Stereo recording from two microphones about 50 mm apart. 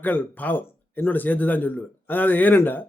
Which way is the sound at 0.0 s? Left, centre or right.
Left.